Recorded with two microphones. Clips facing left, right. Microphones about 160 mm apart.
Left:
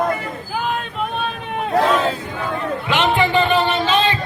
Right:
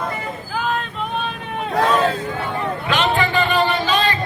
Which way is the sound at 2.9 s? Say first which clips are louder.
Left 2 dB; 20° left (ahead or behind).